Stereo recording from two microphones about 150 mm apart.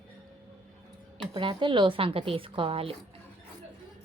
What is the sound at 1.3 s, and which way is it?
Speech, 35° right (ahead or behind).